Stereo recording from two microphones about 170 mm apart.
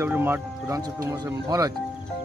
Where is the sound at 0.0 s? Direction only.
10° right (ahead or behind).